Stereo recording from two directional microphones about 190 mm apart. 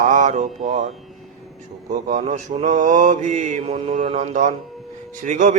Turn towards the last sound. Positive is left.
turn(degrees=-40)  # may be behind; listen again after turning